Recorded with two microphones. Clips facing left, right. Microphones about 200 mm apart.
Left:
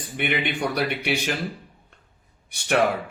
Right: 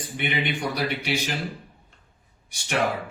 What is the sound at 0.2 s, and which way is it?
Speech, 60° left (ahead or behind).